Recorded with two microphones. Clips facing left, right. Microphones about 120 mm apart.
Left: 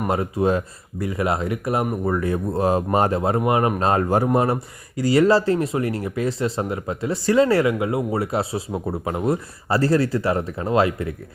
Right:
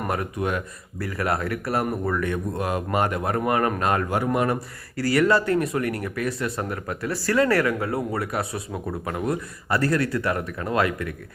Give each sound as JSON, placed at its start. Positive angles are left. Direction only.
{"t": 0.1, "sound": "speech", "side_deg": 30}